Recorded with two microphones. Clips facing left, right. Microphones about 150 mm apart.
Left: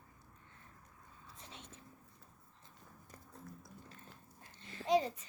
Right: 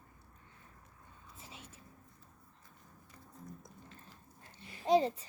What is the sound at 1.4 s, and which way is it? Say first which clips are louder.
Whispering: right 1 dB; 5° right (ahead or behind).